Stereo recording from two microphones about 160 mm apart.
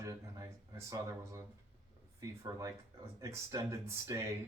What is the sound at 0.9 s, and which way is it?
Speech, 20° right (ahead or behind).